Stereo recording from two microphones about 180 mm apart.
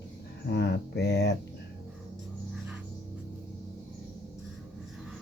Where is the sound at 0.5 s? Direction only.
70° left (ahead or behind).